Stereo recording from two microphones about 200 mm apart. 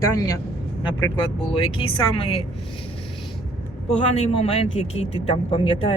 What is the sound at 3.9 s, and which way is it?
Speech, 30° left (ahead or behind).